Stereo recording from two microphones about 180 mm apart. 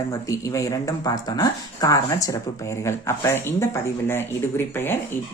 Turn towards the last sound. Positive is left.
turn(degrees=10)  # may be behind; listen again after turning